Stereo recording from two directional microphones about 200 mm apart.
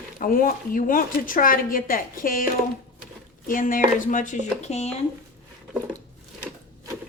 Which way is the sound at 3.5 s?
40° left (ahead or behind).